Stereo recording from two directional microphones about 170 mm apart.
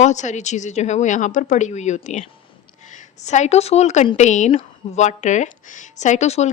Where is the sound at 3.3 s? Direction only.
40° left (ahead or behind).